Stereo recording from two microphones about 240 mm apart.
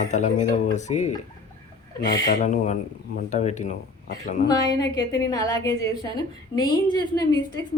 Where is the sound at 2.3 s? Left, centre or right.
Left.